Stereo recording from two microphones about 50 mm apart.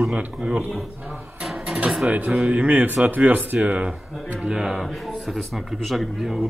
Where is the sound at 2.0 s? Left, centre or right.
Right.